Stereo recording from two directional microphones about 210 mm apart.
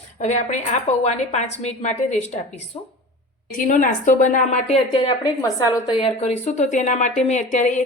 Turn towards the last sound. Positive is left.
turn(degrees=35)  # may be behind; listen again after turning